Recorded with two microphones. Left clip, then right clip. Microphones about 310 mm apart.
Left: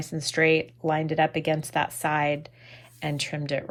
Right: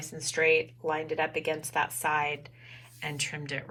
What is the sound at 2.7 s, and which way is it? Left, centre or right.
Speech, centre.